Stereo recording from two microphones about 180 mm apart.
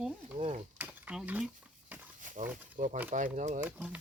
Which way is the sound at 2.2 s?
45° right (ahead or behind).